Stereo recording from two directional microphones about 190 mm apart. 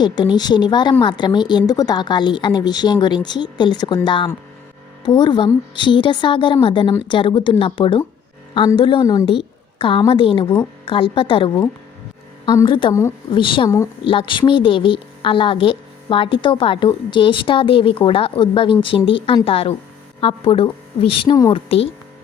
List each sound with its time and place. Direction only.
0.0 s a woman's voice: 20° left (ahead or behind)
13.3 s a woman's voice: 25° left (ahead or behind)